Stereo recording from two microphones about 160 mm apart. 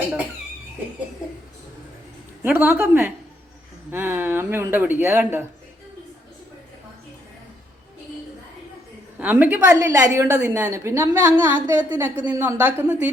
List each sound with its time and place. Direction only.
2.4 s a woman's voice: 10° right (ahead or behind)
3.9 s a woman's voice: 15° right (ahead or behind)
9.1 s a woman's voice: 10° right (ahead or behind)